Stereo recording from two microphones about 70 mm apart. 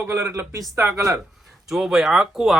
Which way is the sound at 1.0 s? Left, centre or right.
Right.